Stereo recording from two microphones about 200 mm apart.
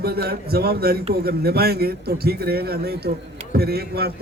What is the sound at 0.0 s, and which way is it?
A man's voice, 50° right (ahead or behind).